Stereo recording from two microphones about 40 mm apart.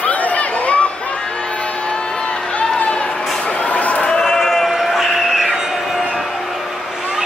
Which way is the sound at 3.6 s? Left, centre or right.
Left.